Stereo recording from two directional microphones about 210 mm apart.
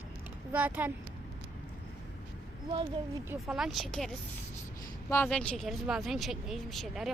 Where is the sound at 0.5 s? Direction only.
10° right (ahead or behind).